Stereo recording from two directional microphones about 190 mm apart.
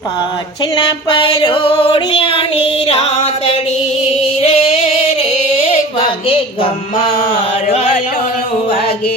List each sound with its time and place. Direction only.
1.4 s music: 25° left (ahead or behind)
4.4 s singing: 30° left (ahead or behind)
5.5 s a sound: 30° left (ahead or behind)
6.2 s music: 30° left (ahead or behind)